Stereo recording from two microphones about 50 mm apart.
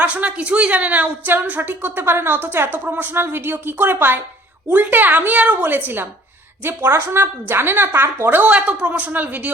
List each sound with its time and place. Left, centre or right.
0.0 s a woman's voice: right
7.2 s a woman's voice: right
8.4 s a woman's voice: right